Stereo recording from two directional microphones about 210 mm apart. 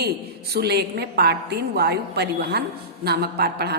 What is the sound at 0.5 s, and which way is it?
A woman's voice, 50° right (ahead or behind).